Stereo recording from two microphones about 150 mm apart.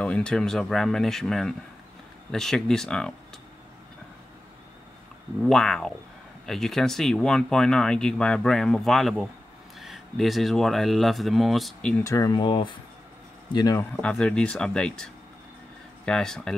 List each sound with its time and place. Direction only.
0.0 s speech: 5° left (ahead or behind)
5.4 s speech: 5° left (ahead or behind)
12.0 s speech: 20° left (ahead or behind)
14.0 s speech: 5° left (ahead or behind)
16.1 s speech: 5° left (ahead or behind)